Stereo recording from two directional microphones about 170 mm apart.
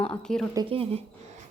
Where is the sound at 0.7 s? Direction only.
35° right (ahead or behind).